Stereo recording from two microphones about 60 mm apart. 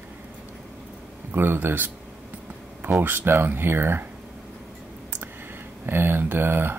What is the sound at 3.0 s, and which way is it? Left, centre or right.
Speech, right.